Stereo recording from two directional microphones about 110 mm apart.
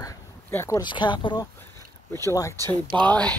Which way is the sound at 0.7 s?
45° left (ahead or behind).